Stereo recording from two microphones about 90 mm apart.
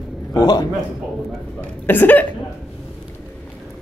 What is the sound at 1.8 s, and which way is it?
Speech, 20° left (ahead or behind).